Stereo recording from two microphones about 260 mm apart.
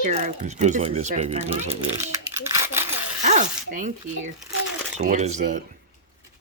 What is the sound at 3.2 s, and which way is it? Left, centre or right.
Zipper, right.